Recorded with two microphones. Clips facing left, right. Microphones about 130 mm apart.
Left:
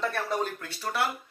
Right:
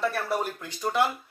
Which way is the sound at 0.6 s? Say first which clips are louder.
Right 4 dB; 15° right (ahead or behind).